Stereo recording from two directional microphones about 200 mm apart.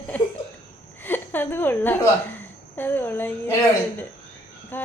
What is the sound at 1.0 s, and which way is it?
A woman's voice, 10° left (ahead or behind).